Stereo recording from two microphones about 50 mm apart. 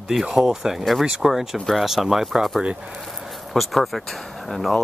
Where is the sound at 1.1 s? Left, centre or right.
Centre.